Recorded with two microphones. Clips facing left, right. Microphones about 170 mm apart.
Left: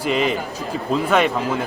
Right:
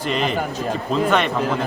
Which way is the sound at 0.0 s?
5° left (ahead or behind).